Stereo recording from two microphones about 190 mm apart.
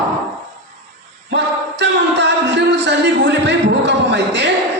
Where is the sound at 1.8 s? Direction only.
65° right (ahead or behind).